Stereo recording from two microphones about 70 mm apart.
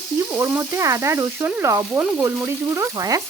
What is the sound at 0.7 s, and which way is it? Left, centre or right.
A woman's voice, right.